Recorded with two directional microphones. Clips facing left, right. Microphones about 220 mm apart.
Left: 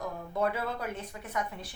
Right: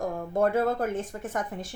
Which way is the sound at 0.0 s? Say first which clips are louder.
Right 6 dB; 45° right (ahead or behind).